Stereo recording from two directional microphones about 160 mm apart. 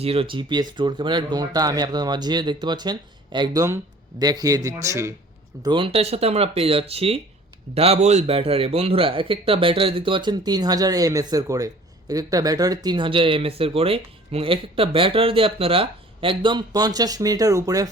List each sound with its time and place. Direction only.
0.0 s speech: 35° right (ahead or behind); by 5.1 s 20° right (ahead or behind)
5.6 s speech: 30° right (ahead or behind)